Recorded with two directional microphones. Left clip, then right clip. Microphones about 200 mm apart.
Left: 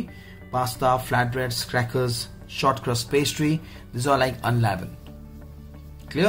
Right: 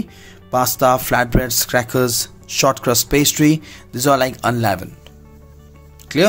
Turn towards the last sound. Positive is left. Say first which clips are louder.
# right 9 dB
turn(degrees=-50)  # may be behind; listen again after turning